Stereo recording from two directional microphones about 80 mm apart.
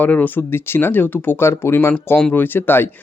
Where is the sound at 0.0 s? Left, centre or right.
Left.